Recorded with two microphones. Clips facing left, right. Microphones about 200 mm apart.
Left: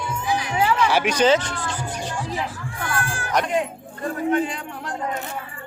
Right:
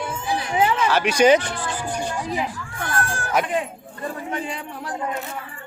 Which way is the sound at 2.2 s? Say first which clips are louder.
Even; 15° right (ahead or behind).